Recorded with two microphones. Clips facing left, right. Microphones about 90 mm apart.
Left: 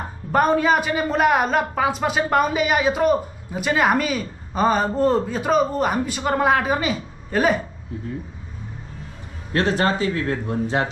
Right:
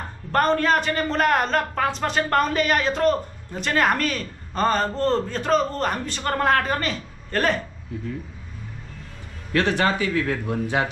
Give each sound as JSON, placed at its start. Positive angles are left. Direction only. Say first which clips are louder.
{"t": 0.0, "sound": "a woman's voice", "louder": "left 2 dB", "side_deg": 10}
{"t": 9.6, "sound": "speech", "louder": "left 1 dB", "side_deg": 20}